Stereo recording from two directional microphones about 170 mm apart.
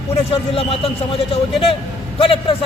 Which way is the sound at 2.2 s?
30° left (ahead or behind).